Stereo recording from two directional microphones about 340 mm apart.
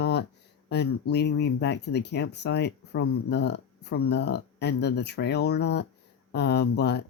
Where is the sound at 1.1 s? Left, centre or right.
Left.